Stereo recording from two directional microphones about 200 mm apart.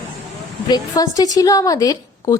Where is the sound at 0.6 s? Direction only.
20° left (ahead or behind).